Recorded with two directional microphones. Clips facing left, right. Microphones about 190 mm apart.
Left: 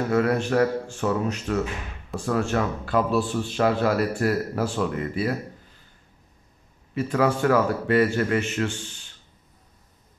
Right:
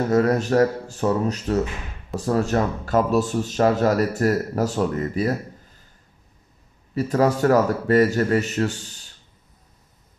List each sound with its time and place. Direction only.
0.1 s a man's voice: 40° right (ahead or behind)
7.0 s a man's voice: 40° right (ahead or behind)